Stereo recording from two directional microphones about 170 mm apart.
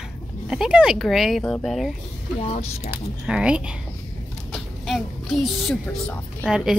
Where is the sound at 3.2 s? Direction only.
5° right (ahead or behind).